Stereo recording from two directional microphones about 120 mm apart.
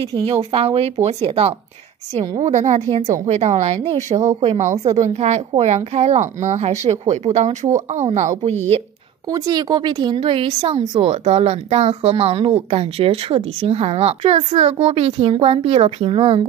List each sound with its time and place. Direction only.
0.3 s speech: 55° right (ahead or behind)
2.4 s speech: 75° right (ahead or behind)
9.3 s a woman's voice: 35° right (ahead or behind); by 10.8 s 50° right (ahead or behind)
11.0 s speech: 60° right (ahead or behind)